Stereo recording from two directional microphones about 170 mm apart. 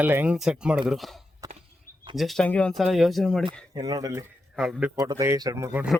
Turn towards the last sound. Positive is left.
turn(degrees=-15)  # may be behind; listen again after turning